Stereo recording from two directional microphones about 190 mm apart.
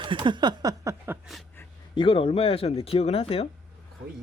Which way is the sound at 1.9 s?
25° left (ahead or behind).